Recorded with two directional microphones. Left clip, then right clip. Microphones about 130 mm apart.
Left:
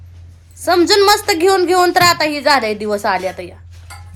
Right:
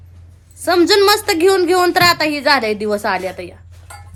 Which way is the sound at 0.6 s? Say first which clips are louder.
Left 1 dB; 25° right (ahead or behind).